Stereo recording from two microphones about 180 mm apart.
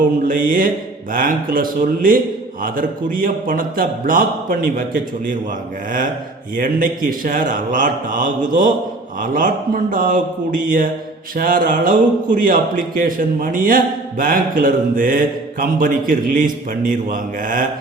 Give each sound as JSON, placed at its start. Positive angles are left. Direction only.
{"t": 0.3, "sound": "a man's voice", "side_deg": -50}
{"t": 6.6, "sound": "a man's voice", "side_deg": -50}